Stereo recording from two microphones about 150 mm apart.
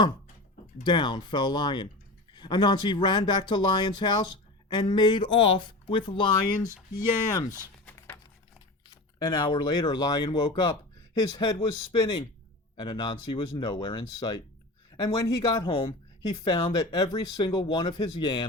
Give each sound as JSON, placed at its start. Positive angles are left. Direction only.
{"t": 0.9, "sound": "speech", "side_deg": 30}
{"t": 7.9, "sound": "a sound", "side_deg": 15}
{"t": 9.1, "sound": "speech", "side_deg": 25}
{"t": 16.7, "sound": "speech", "side_deg": 25}